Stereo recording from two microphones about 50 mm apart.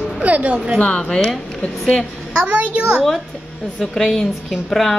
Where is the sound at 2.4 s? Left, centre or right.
Right.